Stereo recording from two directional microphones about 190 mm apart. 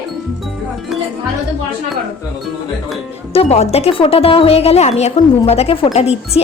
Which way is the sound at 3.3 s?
35° left (ahead or behind).